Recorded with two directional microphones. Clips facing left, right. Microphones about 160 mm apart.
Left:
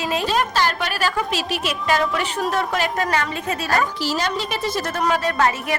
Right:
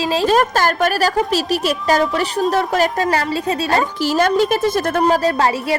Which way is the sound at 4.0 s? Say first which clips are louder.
Right 8 dB; 50° right (ahead or behind).